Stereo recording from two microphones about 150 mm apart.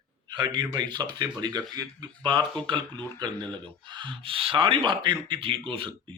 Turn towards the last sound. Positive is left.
turn(degrees=-35)  # may be behind; listen again after turning